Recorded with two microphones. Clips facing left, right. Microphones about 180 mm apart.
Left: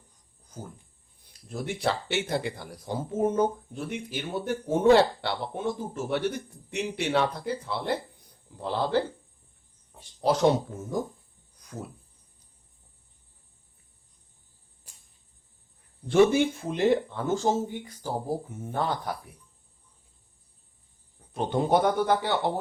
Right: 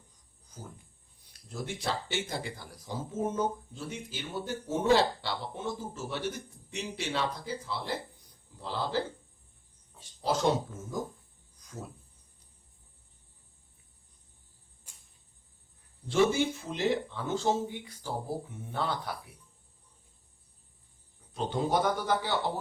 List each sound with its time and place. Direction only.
1.5 s speech: 60° left (ahead or behind)
16.0 s speech: 55° left (ahead or behind)
21.3 s speech: 60° left (ahead or behind)